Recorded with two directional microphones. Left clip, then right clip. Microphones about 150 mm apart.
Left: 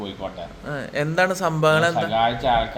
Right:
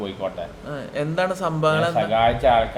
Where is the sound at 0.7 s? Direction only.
25° left (ahead or behind).